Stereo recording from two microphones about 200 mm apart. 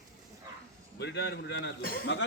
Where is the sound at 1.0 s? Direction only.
55° left (ahead or behind).